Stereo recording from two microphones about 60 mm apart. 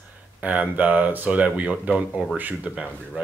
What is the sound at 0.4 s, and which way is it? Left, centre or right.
Speech, right.